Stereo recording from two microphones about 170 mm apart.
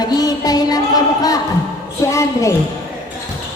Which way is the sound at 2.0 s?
15° left (ahead or behind).